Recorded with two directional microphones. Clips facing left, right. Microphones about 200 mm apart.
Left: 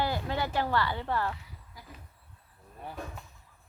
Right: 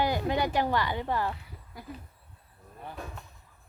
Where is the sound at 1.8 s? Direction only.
60° right (ahead or behind).